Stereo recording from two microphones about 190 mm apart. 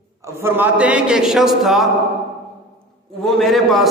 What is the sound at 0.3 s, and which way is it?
A man's voice, 10° right (ahead or behind).